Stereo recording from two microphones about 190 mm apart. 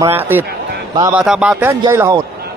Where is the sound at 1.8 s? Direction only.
20° right (ahead or behind).